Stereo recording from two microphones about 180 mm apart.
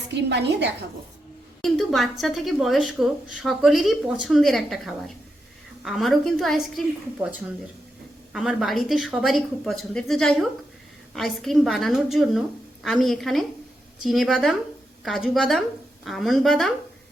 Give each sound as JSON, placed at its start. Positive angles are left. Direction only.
{"t": 0.1, "sound": "a woman's voice", "side_deg": -70}
{"t": 1.6, "sound": "a woman's voice", "side_deg": 0}
{"t": 7.2, "sound": "a woman's voice", "side_deg": -10}